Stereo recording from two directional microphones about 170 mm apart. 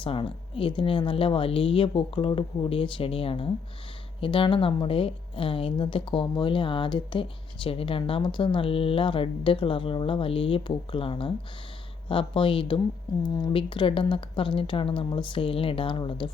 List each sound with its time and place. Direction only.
0.0 s a woman's voice: 30° left (ahead or behind)